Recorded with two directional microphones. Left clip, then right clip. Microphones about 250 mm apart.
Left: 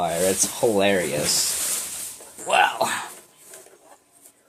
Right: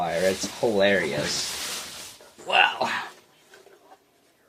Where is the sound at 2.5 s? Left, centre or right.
Left.